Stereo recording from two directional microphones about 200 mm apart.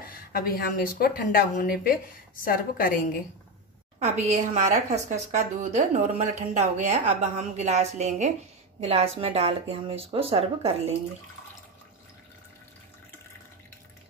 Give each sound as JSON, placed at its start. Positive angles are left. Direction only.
{"t": 0.3, "sound": "speech", "side_deg": 50}
{"t": 4.0, "sound": "speech", "side_deg": -35}